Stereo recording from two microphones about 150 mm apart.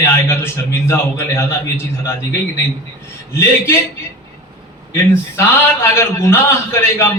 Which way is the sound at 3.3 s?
15° left (ahead or behind).